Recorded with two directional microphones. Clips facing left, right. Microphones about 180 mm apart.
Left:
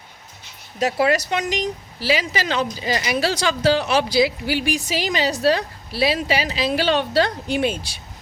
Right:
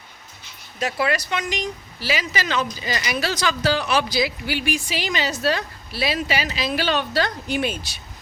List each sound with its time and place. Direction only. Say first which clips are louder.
0.8 s speech: left 4 dB; 40° left (ahead or behind)